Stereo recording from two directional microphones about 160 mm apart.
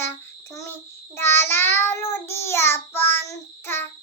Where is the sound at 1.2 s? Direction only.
15° left (ahead or behind).